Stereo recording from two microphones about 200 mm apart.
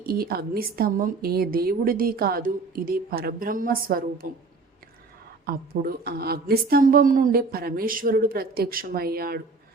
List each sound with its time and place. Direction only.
0.0 s a woman's voice: 50° right (ahead or behind)
5.5 s a woman's voice: 50° right (ahead or behind)